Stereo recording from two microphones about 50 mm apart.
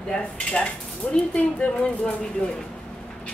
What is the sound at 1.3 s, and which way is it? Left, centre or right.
A woman's voice, left.